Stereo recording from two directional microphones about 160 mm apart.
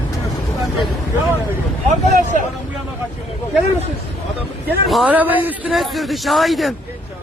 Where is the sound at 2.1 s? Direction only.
50° right (ahead or behind).